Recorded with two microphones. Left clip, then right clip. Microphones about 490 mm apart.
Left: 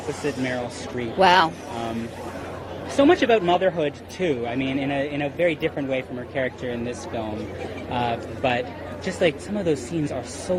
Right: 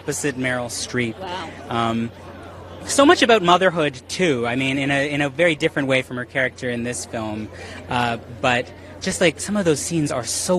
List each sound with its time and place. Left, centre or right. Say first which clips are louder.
0.3 s a man's voice: right 3 dB; right
1.2 s music: left 14 dB; left
3.0 s a man's voice: right 4 dB; right